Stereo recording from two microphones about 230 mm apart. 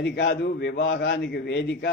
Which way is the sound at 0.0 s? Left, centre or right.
Left.